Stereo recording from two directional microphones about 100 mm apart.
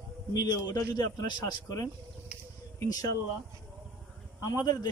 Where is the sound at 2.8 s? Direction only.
40° left (ahead or behind).